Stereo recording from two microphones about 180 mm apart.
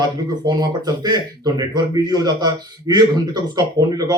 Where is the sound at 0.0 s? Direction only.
20° right (ahead or behind).